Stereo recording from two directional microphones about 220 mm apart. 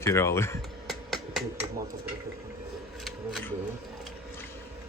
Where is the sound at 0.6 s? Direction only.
Centre (ahead or behind).